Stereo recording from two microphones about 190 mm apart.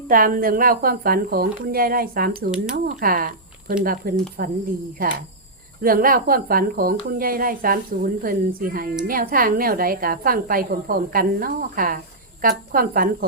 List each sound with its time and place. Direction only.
0.1 s a woman's voice: 50° right (ahead or behind)